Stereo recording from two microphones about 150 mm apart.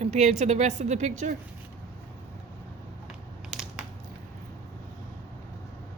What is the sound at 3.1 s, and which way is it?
Crushing, 5° right (ahead or behind).